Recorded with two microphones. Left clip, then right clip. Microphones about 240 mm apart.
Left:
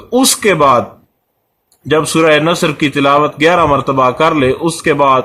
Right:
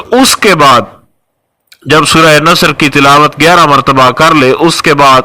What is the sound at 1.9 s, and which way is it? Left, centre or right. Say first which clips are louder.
Speech: right 6 dB; right.